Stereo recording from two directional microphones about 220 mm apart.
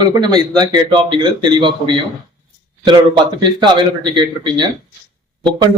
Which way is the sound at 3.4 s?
20° right (ahead or behind).